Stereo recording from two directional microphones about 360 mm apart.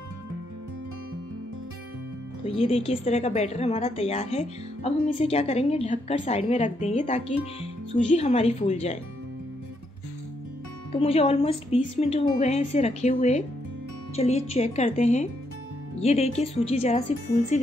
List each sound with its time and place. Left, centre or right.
2.4 s a woman's voice: centre
10.9 s a woman's voice: centre